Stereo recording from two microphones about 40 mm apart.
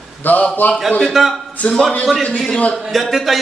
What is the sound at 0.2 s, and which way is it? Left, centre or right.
Speech, left.